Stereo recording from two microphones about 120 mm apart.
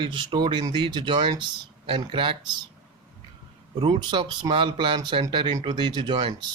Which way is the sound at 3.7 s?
40° right (ahead or behind).